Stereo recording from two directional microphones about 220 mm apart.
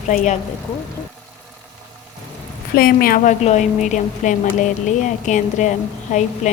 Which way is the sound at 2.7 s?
40° left (ahead or behind).